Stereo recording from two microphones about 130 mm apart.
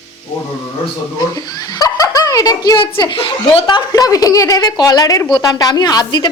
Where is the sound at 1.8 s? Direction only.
25° left (ahead or behind).